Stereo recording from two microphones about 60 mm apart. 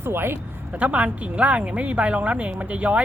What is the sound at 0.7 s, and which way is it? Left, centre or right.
A woman's voice, right.